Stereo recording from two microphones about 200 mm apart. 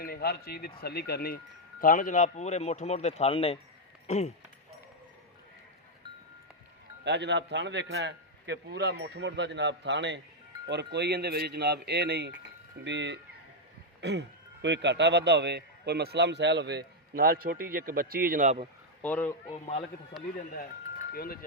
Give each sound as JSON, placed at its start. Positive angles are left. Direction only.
{"t": 0.0, "sound": "speech", "side_deg": 50}
{"t": 7.0, "sound": "a man's voice", "side_deg": -60}
{"t": 19.0, "sound": "speech", "side_deg": 10}
{"t": 19.5, "sound": "speech", "side_deg": 30}
{"t": 21.1, "sound": "speech", "side_deg": 50}